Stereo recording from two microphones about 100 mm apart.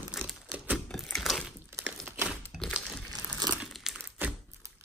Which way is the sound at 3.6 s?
5° right (ahead or behind).